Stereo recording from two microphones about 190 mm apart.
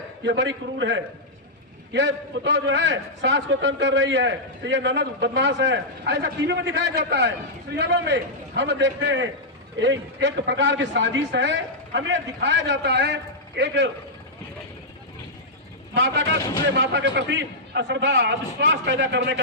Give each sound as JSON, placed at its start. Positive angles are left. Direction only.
{"t": 0.3, "sound": "a man's voice", "side_deg": -70}
{"t": 16.0, "sound": "a man's voice", "side_deg": -65}